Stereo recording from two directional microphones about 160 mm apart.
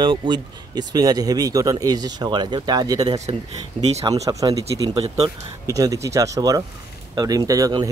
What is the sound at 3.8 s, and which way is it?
Speech, 35° right (ahead or behind).